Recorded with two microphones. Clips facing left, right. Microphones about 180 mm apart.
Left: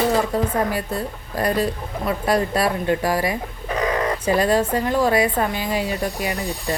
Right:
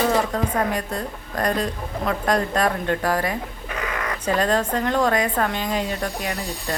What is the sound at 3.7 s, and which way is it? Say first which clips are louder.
Bird: left 7 dB; 35° left (ahead or behind).